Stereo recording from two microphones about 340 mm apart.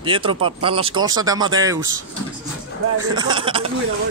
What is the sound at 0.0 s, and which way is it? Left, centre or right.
Speech, centre.